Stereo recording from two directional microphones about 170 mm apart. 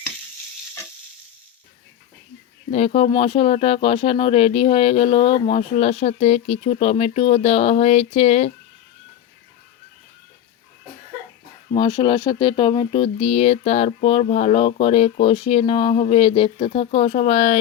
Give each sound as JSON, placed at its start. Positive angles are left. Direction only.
{"t": 2.6, "sound": "speech", "side_deg": 35}
{"t": 11.7, "sound": "speech", "side_deg": 25}